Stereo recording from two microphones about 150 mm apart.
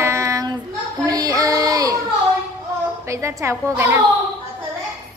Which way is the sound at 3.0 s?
20° right (ahead or behind).